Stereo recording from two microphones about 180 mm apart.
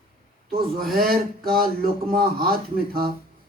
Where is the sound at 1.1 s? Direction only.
55° right (ahead or behind).